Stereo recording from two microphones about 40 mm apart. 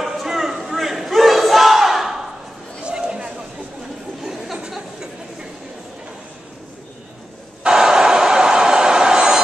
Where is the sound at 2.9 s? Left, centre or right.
Right.